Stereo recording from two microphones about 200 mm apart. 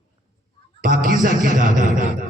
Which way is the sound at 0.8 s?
45° right (ahead or behind).